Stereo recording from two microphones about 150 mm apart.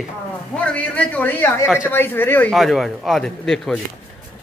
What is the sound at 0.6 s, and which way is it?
A man's voice, 10° left (ahead or behind).